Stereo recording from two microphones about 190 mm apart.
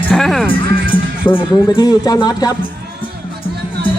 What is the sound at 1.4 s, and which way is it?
Speech, 20° left (ahead or behind).